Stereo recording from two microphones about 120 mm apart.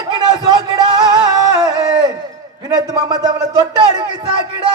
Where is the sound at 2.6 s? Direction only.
30° right (ahead or behind).